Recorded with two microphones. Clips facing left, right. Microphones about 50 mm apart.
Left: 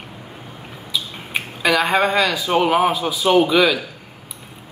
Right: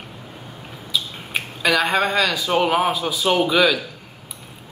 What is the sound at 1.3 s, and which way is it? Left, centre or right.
Speech, centre.